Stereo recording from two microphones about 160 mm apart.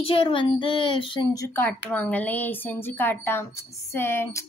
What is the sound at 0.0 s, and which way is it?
Speech, 35° left (ahead or behind).